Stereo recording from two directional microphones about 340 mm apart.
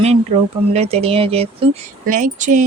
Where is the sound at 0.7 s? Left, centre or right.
Centre.